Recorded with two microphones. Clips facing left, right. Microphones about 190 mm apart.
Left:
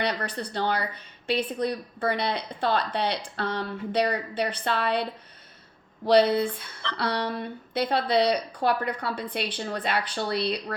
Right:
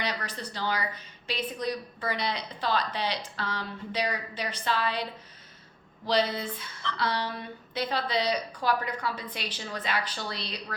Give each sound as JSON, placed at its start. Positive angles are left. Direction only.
{"t": 0.0, "sound": "a woman's voice", "side_deg": 60}
{"t": 6.1, "sound": "a woman's voice", "side_deg": 60}